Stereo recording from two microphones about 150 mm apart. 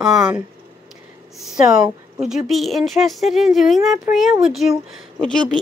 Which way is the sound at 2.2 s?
Centre (ahead or behind).